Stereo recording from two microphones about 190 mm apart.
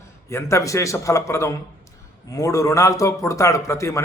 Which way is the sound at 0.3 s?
15° left (ahead or behind).